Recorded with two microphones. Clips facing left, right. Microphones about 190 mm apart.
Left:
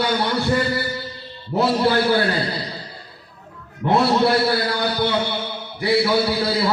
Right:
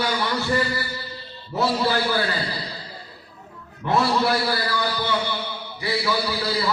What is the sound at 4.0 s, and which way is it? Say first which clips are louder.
A man's voice: left 4 dB; 60° left (ahead or behind).